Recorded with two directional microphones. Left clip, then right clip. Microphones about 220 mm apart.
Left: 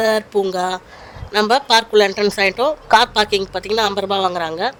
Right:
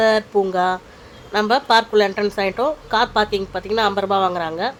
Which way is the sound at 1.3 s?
35° left (ahead or behind).